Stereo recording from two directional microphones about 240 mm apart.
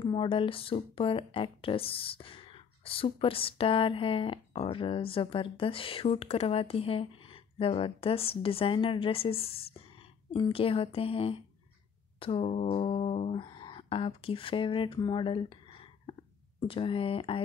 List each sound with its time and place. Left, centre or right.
0.0 s speech: left
16.6 s speech: left